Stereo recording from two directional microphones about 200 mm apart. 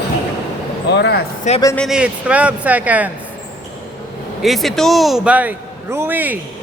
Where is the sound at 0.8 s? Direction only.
55° left (ahead or behind).